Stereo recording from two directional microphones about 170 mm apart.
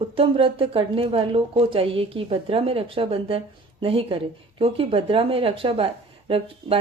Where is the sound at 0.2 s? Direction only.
30° right (ahead or behind).